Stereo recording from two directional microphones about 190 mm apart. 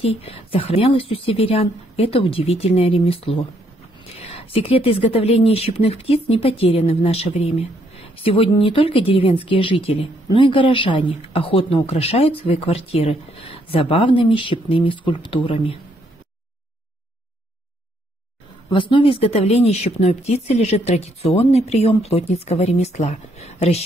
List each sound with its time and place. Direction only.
0.0 s speech: 30° left (ahead or behind)
18.7 s speech: 25° left (ahead or behind)